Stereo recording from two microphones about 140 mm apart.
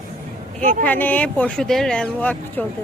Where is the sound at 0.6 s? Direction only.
65° right (ahead or behind).